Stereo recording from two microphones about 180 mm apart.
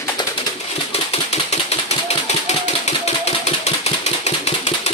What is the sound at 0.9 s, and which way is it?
Typewriter, 35° left (ahead or behind).